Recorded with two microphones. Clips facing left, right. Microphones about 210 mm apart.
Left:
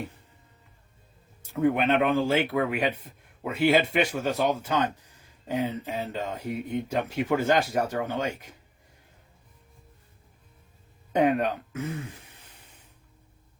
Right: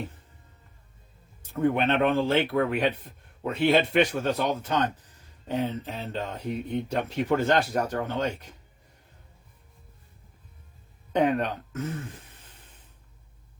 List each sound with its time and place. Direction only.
1.4 s speech: 10° left (ahead or behind)
11.2 s speech: 10° left (ahead or behind)